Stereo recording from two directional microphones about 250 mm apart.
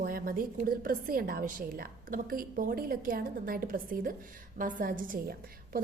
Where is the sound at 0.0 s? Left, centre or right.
Right.